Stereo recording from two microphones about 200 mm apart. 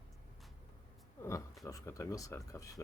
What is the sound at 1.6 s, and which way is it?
Speech, 15° left (ahead or behind).